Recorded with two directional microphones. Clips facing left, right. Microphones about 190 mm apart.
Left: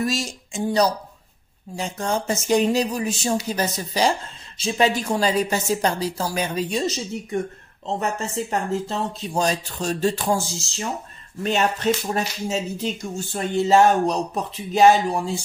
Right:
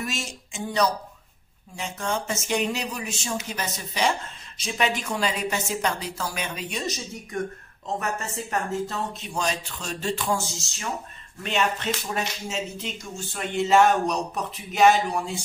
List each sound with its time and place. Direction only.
0.0 s speech: 35° left (ahead or behind)
11.4 s speech: 40° left (ahead or behind)